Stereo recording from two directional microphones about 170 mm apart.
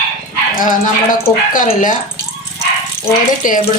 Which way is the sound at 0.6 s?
50° left (ahead or behind).